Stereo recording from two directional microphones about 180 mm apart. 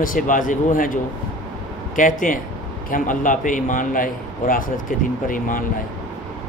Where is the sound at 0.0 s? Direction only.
50° left (ahead or behind).